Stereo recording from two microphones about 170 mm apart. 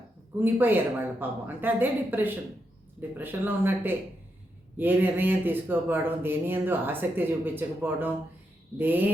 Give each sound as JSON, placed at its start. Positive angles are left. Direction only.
{"t": 0.3, "sound": "speech", "side_deg": -10}